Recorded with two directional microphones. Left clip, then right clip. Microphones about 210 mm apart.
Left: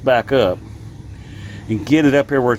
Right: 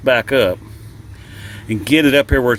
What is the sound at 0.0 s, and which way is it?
Speech, 15° right (ahead or behind).